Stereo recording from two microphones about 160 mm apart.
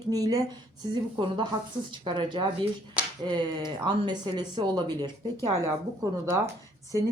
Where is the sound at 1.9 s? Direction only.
30° right (ahead or behind).